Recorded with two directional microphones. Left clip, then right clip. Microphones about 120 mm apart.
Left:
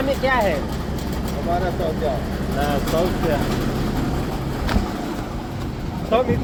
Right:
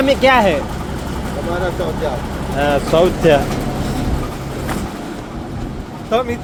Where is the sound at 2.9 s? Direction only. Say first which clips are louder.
Right 9 dB; 90° right.